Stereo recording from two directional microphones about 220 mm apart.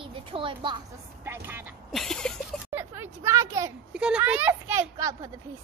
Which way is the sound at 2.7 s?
10° right (ahead or behind).